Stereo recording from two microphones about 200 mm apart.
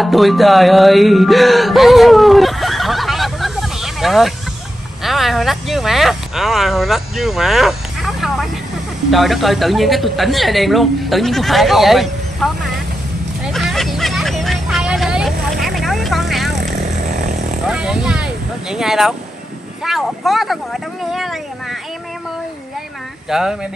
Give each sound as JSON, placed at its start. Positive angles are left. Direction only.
{"t": 0.0, "sound": "music", "side_deg": 0}
{"t": 5.0, "sound": "a woman's voice", "side_deg": 0}
{"t": 13.5, "sound": "vehicle", "side_deg": 0}
{"t": 17.1, "sound": "vehicle", "side_deg": -35}
{"t": 17.6, "sound": "speech", "side_deg": -5}
{"t": 23.3, "sound": "a woman's voice", "side_deg": 0}